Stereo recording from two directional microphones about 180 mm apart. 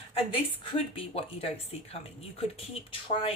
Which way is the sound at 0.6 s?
30° left (ahead or behind).